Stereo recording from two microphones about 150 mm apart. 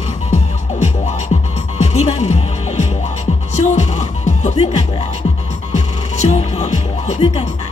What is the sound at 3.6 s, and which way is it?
Speech, 45° left (ahead or behind).